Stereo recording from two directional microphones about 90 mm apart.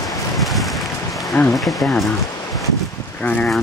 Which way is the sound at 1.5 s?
Centre (ahead or behind).